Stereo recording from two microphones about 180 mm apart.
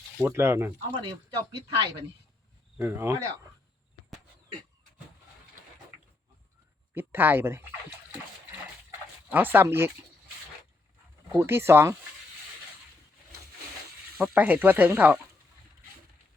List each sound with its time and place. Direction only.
0.2 s speech: 15° right (ahead or behind)
1.5 s speech: 25° right (ahead or behind)
2.7 s speech: 15° right (ahead or behind)
6.9 s speech: 10° right (ahead or behind)
9.3 s speech: 10° right (ahead or behind)
11.3 s speech: 15° right (ahead or behind)
14.2 s speech: 10° right (ahead or behind)